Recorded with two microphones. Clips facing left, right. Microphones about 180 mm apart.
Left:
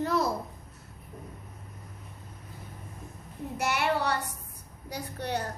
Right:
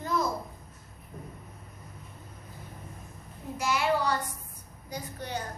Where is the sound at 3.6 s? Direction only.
65° left (ahead or behind).